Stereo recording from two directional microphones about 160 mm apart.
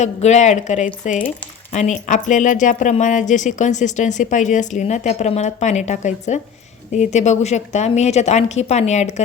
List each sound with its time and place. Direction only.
0.0 s speech: 45° left (ahead or behind)